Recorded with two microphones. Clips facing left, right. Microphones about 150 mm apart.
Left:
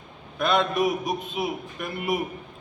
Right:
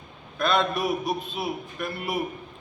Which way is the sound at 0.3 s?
20° left (ahead or behind).